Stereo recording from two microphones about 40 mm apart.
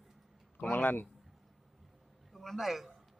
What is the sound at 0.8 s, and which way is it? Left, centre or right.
Speech, left.